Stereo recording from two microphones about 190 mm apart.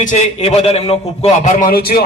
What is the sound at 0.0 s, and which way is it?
A man's voice, 40° left (ahead or behind).